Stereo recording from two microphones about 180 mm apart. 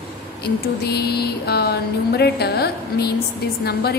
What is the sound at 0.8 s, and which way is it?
A woman's voice, 65° left (ahead or behind).